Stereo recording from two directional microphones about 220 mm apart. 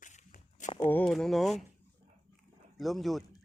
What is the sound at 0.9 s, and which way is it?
Speech, 5° left (ahead or behind).